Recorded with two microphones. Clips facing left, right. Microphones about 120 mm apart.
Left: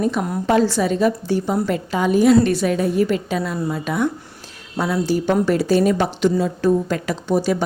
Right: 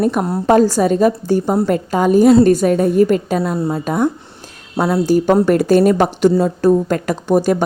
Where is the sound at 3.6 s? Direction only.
30° right (ahead or behind).